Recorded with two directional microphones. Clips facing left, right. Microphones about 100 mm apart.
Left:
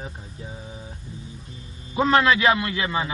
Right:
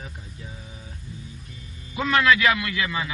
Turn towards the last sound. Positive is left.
turn(degrees=30)  # may be behind; listen again after turning